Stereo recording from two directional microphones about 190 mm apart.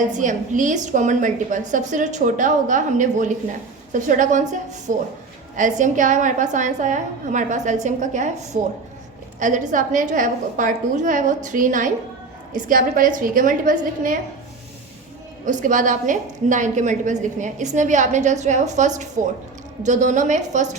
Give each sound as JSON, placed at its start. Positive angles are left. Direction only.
{"t": 0.2, "sound": "a woman's voice", "side_deg": -40}
{"t": 15.4, "sound": "a woman's voice", "side_deg": -45}